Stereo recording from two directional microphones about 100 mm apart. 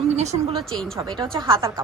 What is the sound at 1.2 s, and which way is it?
Speech, 55° right (ahead or behind).